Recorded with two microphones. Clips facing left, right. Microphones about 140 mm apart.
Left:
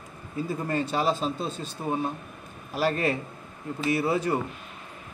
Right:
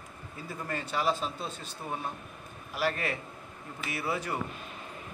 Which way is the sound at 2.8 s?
30° left (ahead or behind).